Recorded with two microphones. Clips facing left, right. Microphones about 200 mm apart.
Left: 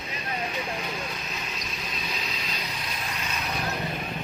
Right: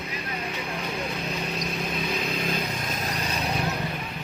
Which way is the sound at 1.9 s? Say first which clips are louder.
Right 5 dB; 55° right (ahead or behind).